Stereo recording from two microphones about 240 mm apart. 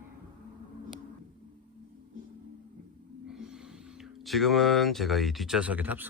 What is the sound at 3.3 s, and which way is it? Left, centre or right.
Speech, centre.